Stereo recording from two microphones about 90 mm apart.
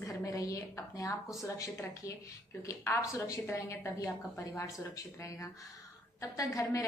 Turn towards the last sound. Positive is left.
turn(degrees=40)  # may be behind; listen again after turning